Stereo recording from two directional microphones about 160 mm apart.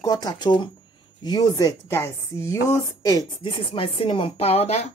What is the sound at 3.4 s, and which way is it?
Speech, 35° left (ahead or behind).